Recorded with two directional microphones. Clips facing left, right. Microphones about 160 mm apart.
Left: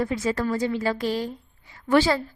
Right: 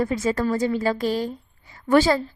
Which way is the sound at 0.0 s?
40° right (ahead or behind).